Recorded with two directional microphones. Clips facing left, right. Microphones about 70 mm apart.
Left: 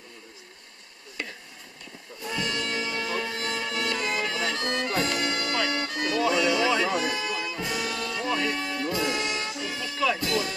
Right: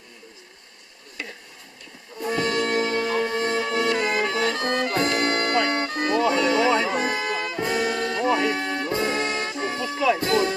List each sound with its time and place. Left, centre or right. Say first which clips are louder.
2.2 s music: right 7 dB; right
5.5 s music: right 5 dB; right
6.7 s music: right 4 dB; right
6.9 s brass instrument: right 3 dB; right
8.8 s music: right 1 dB; right